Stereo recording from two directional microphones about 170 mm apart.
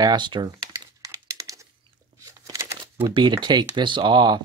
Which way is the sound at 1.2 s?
20° right (ahead or behind).